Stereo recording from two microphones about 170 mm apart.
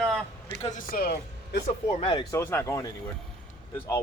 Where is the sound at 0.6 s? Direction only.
50° left (ahead or behind).